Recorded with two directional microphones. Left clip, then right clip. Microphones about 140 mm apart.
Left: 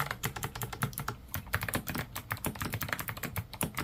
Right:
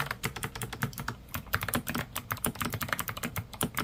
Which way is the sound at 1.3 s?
20° right (ahead or behind).